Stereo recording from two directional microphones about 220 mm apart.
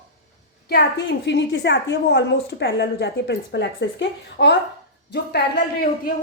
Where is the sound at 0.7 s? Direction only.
50° left (ahead or behind).